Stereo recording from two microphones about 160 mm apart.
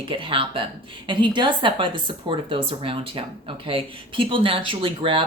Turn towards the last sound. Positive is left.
turn(degrees=-35)  # may be behind; listen again after turning